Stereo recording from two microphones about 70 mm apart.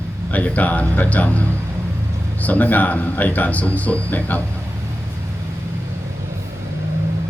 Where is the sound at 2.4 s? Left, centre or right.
Left.